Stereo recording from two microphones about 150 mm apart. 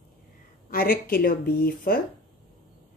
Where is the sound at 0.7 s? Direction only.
75° left (ahead or behind).